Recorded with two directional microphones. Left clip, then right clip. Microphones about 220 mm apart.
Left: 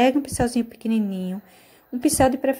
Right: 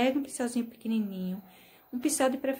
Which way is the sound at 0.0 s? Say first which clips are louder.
Left 9 dB; 25° left (ahead or behind).